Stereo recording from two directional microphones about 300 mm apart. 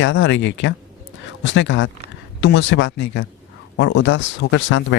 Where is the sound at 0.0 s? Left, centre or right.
Left.